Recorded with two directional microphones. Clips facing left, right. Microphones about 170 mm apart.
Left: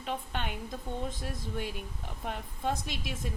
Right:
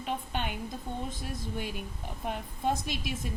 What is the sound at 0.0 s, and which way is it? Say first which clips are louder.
Speech: right 2 dB; 5° right (ahead or behind).